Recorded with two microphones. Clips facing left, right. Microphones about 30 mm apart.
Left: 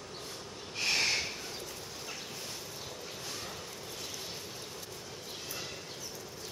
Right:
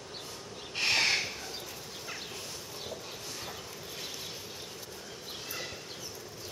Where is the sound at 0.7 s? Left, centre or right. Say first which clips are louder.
Right 3 dB; right.